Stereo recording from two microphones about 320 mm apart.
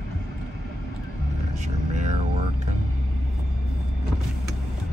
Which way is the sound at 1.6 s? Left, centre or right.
Right.